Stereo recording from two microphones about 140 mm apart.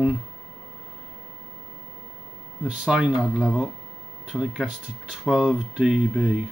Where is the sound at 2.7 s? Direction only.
5° right (ahead or behind).